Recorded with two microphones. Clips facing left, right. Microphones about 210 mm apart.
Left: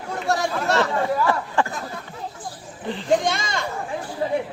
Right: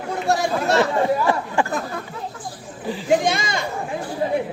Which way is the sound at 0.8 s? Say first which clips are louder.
Right 2 dB; 15° right (ahead or behind).